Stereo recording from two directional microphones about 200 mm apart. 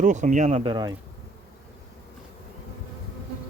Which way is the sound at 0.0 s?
40° right (ahead or behind).